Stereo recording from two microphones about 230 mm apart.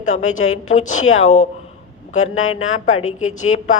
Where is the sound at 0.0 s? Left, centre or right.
Left.